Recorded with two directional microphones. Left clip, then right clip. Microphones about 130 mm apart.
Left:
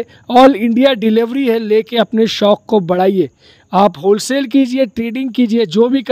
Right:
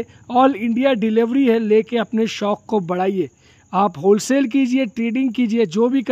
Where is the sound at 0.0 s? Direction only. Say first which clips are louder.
Left 8 dB; 40° left (ahead or behind).